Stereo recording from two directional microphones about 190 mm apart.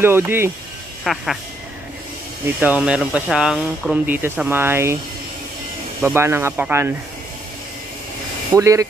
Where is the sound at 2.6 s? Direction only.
5° right (ahead or behind).